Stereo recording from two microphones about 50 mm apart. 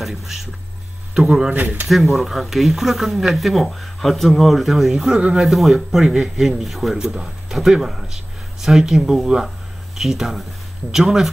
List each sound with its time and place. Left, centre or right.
0.0 s speech: centre
5.1 s speech: centre
5.4 s speech: centre
7.0 s speech: centre